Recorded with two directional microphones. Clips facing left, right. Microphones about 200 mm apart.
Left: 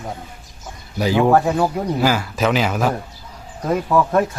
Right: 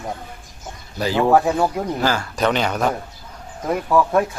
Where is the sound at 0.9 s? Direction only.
15° left (ahead or behind).